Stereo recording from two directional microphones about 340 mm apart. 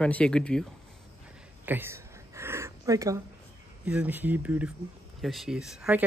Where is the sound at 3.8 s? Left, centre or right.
Centre.